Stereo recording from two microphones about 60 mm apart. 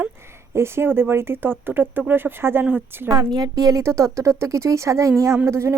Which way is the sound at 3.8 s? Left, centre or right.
Right.